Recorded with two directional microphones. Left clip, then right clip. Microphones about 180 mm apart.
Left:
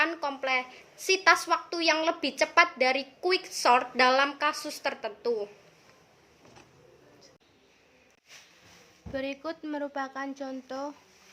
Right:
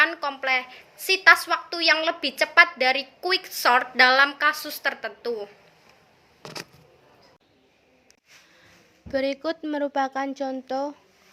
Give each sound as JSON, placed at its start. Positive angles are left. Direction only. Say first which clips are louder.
{"t": 0.0, "sound": "a woman's voice", "louder": "right 6 dB", "side_deg": 15}
{"t": 9.1, "sound": "speech", "louder": "right 9 dB", "side_deg": -35}